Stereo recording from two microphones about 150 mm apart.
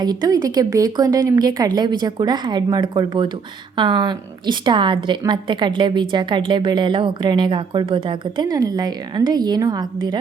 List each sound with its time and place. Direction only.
0.0 s a woman's voice: 25° right (ahead or behind)